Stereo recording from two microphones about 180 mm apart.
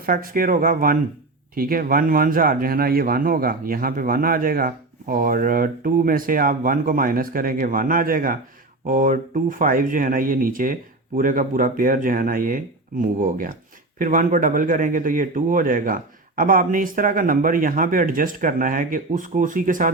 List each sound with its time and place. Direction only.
0.0 s speech: 50° right (ahead or behind)